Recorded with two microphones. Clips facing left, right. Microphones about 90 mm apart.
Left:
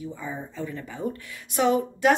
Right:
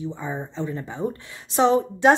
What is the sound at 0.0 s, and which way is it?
Speech, 25° right (ahead or behind).